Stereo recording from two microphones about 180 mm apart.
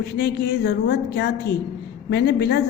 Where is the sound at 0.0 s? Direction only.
60° left (ahead or behind).